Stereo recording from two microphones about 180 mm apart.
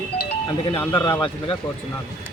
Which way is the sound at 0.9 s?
25° left (ahead or behind).